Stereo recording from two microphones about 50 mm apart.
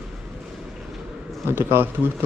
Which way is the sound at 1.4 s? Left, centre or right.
Right.